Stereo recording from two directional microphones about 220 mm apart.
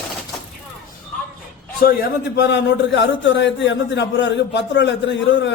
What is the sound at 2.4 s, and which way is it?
A man's voice, 50° left (ahead or behind).